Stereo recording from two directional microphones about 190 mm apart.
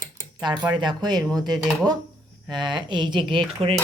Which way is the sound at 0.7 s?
25° right (ahead or behind).